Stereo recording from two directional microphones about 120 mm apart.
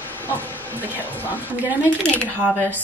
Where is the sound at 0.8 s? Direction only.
15° right (ahead or behind).